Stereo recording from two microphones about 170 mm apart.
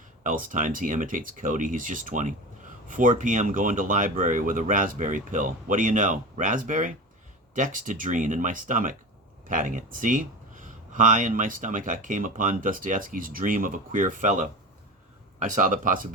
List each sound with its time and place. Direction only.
0.2 s speech: 50° right (ahead or behind)
15.4 s speech: 50° right (ahead or behind)